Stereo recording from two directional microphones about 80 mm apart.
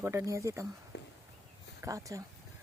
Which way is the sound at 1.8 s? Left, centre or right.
Right.